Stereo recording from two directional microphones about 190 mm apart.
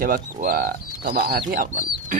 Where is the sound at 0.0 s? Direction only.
50° right (ahead or behind).